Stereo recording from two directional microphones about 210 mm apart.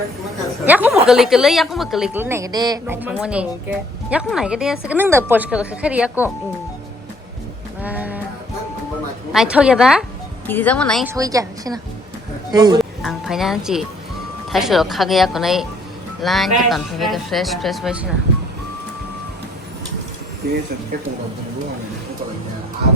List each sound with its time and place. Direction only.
0.6 s a sound: 10° right (ahead or behind)
1.0 s a woman's voice: centre (ahead or behind); by 2.8 s 20° right (ahead or behind)
2.8 s a woman's voice: 10° right (ahead or behind)
7.8 s music: 5° right (ahead or behind)
9.3 s a woman's voice: 5° right (ahead or behind)
10.4 s speech: 10° left (ahead or behind)
11.0 s a woman's voice: 15° right (ahead or behind)
12.8 s a woman's voice: centre (ahead or behind)
20.4 s speech: 50° right (ahead or behind)